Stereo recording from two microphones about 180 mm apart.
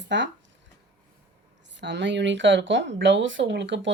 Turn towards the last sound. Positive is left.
turn(degrees=-85)